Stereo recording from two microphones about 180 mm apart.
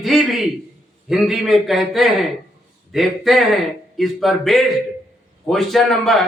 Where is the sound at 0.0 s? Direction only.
Centre (ahead or behind).